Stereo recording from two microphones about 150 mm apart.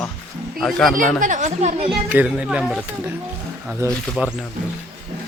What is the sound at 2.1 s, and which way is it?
Speech, 10° right (ahead or behind).